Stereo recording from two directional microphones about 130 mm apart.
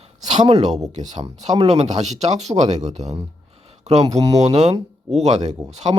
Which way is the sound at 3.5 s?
50° right (ahead or behind).